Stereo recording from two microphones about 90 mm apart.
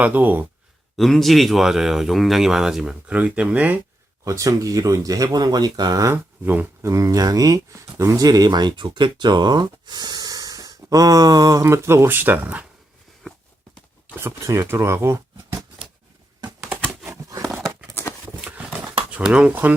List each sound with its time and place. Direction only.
0.0 s speech: 20° right (ahead or behind)
0.9 s speech: centre (ahead or behind); by 3.8 s 15° right (ahead or behind)
4.3 s speech: 40° right (ahead or behind)
6.4 s speech: 20° right (ahead or behind)
6.8 s speech: 35° right (ahead or behind); by 12.6 s 20° right (ahead or behind)
14.2 s speech: 30° right (ahead or behind)
19.1 s speech: 10° right (ahead or behind)